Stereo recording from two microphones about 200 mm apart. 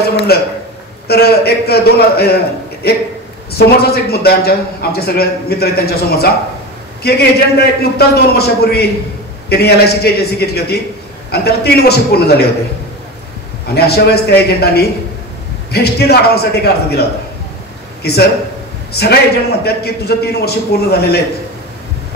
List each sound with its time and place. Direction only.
1.0 s a man's voice: 50° left (ahead or behind)
13.7 s a man's voice: 55° left (ahead or behind)
18.0 s a man's voice: 55° left (ahead or behind)